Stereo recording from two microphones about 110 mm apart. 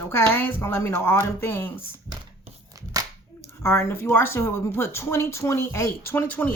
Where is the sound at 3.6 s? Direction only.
20° left (ahead or behind).